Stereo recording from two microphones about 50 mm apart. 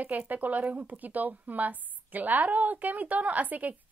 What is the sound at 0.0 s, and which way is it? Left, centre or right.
A woman's voice, right.